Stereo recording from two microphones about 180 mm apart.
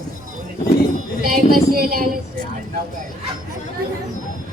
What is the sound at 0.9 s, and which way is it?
Speech, 50° right (ahead or behind).